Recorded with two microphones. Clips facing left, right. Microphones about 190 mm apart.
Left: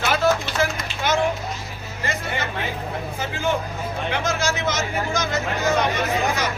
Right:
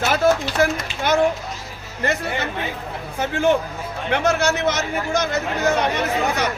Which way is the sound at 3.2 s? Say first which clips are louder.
Right 7 dB; 60° right (ahead or behind).